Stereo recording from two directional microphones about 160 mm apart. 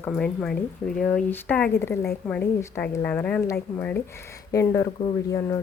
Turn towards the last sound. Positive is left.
turn(degrees=20)  # may be behind; listen again after turning